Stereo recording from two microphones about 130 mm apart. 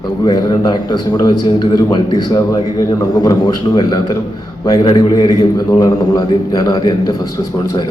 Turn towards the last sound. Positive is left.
turn(degrees=30)  # may be behind; listen again after turning